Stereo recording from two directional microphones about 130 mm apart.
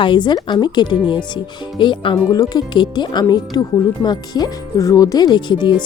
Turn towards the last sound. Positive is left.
turn(degrees=35)  # may be behind; listen again after turning